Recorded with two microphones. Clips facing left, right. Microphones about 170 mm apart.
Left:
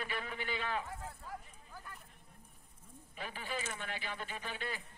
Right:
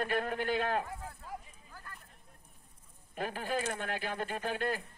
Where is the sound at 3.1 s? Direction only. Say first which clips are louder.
Right 7 dB; 45° right (ahead or behind).